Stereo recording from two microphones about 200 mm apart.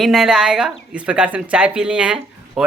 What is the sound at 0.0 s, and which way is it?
Speech, centre (ahead or behind).